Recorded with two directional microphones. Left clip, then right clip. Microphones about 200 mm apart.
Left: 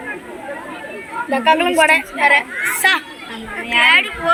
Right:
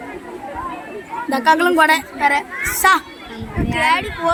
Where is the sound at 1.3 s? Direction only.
85° right.